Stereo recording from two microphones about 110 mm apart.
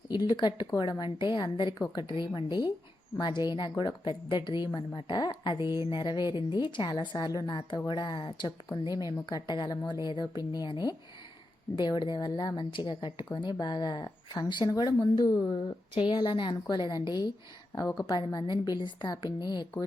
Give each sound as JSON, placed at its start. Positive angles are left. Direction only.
{"t": 0.3, "sound": "a woman's voice", "side_deg": 45}
{"t": 5.5, "sound": "speech", "side_deg": -25}
{"t": 5.9, "sound": "a woman's voice", "side_deg": 45}